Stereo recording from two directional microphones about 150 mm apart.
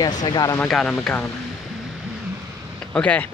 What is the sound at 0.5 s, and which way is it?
Speech, 5° left (ahead or behind).